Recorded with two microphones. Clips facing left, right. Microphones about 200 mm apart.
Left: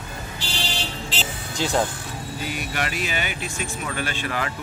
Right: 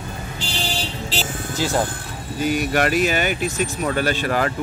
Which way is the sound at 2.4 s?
45° right (ahead or behind).